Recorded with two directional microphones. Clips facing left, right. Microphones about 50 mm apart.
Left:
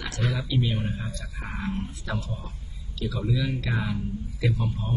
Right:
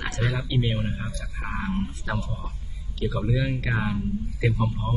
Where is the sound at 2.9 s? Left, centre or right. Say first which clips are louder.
Right 2 dB; right.